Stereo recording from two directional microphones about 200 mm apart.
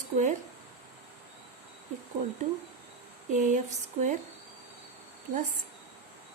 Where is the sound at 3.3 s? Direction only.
40° right (ahead or behind).